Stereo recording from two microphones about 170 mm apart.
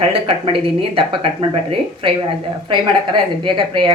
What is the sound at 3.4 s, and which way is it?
Speech, 30° right (ahead or behind).